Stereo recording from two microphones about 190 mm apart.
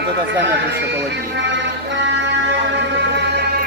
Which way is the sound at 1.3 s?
70° right (ahead or behind).